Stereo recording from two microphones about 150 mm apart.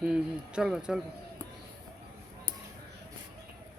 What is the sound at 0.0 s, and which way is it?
Speech, 5° right (ahead or behind).